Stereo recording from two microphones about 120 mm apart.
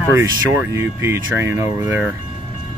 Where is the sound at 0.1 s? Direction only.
25° right (ahead or behind).